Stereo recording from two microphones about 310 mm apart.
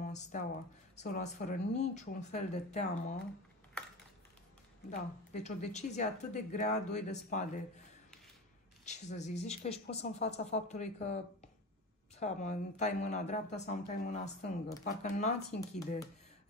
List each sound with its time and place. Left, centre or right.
0.0 s speech: left
4.9 s speech: left
8.8 s speech: left